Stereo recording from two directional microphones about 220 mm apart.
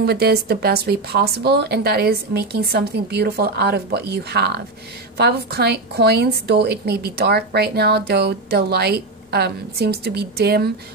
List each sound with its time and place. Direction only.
0.0 s a woman's voice: 45° right (ahead or behind)